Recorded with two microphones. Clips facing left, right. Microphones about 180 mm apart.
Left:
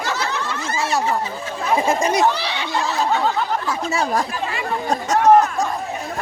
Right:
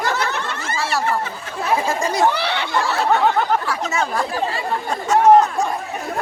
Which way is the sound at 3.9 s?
35° left (ahead or behind).